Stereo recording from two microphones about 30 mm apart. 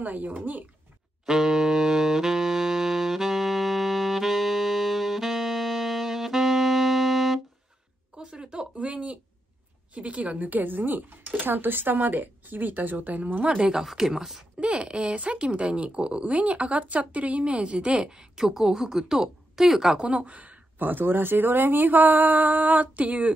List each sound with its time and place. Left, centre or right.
0.0 s speech: right
1.2 s saxophone: centre
8.2 s a sound: right
8.7 s a woman's voice: right
13.8 s speech: centre
14.6 s speech: right
18.0 s a woman's voice: right
20.1 s speech: right